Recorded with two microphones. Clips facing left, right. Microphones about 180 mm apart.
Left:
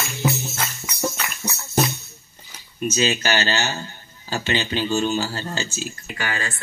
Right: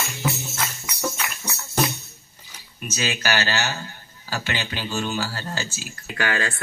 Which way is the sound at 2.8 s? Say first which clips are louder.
Left 5 dB; 25° left (ahead or behind).